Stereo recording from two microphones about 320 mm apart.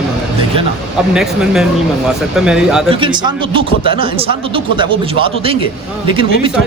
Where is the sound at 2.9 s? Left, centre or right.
Centre.